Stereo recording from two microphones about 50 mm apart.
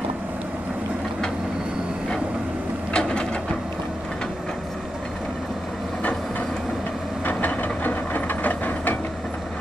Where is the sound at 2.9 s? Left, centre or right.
Centre.